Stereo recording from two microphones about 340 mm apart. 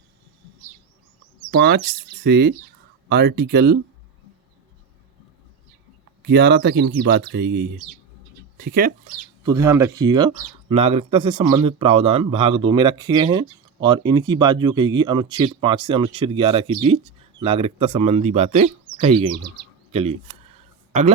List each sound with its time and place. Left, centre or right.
1.5 s speech: right
6.2 s speech: right
9.5 s speech: centre
19.5 s bird: centre